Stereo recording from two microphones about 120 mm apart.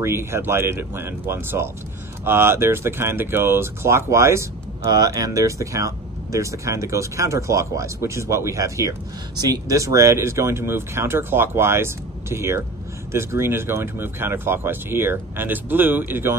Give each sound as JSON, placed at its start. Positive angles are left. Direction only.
{"t": 0.0, "sound": "speech", "side_deg": -20}
{"t": 4.8, "sound": "speech", "side_deg": -35}